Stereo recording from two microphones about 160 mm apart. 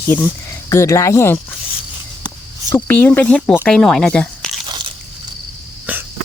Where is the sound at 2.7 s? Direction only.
10° left (ahead or behind).